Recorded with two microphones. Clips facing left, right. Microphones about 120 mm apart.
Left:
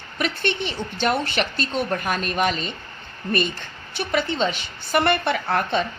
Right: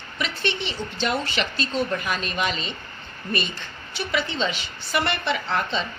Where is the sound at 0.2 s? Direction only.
50° left (ahead or behind).